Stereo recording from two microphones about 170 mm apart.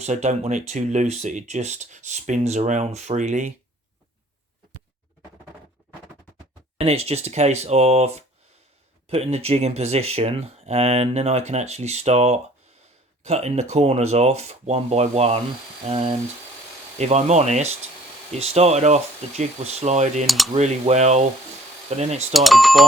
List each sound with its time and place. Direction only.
0.0 s speech: 40° right (ahead or behind)
6.7 s speech: 35° right (ahead or behind)
17.0 s speech: 40° right (ahead or behind)
20.2 s speech: centre (ahead or behind)
20.5 s speech: 40° right (ahead or behind)
22.3 s speech: centre (ahead or behind)